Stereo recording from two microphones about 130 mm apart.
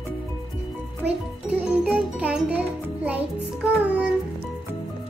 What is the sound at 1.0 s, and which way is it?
Jingle, 10° right (ahead or behind).